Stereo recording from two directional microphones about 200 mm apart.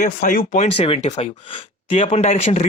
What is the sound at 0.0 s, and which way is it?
Speech, 45° left (ahead or behind).